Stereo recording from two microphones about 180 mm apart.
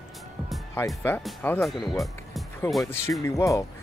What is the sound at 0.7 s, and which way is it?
Speech, 10° left (ahead or behind).